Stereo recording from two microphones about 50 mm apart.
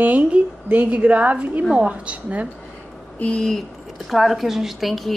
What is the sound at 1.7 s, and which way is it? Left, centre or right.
Speech, right.